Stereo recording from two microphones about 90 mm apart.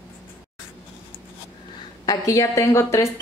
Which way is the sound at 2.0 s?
35° left (ahead or behind).